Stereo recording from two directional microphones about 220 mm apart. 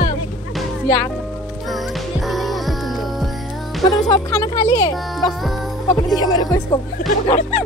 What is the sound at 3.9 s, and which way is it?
Speech, 15° left (ahead or behind).